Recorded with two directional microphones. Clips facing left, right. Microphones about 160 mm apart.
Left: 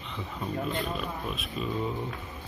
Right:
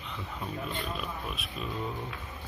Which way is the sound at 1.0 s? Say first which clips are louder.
Left 3 dB; centre (ahead or behind).